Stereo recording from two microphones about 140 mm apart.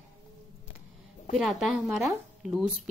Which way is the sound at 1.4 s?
5° right (ahead or behind).